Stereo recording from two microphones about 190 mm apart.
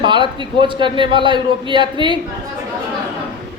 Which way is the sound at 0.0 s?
25° right (ahead or behind).